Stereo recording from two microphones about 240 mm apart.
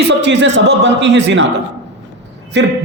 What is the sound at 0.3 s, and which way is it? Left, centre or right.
A man's voice, right.